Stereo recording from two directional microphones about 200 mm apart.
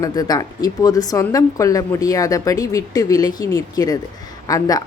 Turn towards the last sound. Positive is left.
turn(degrees=20)  # may be behind; listen again after turning